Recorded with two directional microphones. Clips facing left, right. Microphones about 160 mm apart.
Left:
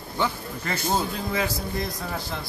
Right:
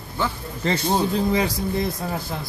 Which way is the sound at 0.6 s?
30° right (ahead or behind).